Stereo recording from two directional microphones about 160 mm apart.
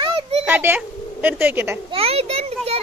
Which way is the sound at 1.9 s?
40° right (ahead or behind).